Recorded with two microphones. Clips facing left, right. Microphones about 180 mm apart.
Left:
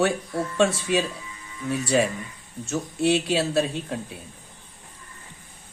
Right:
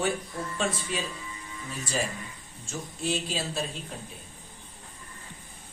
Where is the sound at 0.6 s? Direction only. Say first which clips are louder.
Left 10 dB; 80° left.